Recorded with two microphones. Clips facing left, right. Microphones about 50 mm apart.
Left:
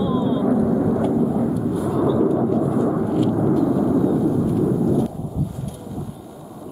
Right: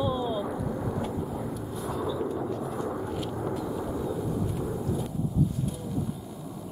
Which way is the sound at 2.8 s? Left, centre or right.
Centre.